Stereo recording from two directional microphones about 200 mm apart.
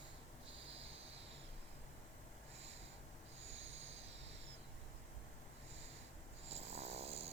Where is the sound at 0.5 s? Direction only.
65° right (ahead or behind).